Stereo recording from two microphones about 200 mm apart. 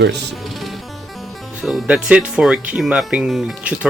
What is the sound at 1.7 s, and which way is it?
Speech, centre (ahead or behind).